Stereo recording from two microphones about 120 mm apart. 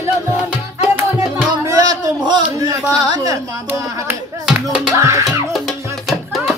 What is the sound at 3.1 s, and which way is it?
Carnatic music, 30° right (ahead or behind).